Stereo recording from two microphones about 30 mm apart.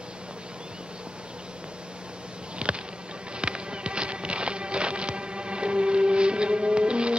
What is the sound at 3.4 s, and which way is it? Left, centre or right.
Music, right.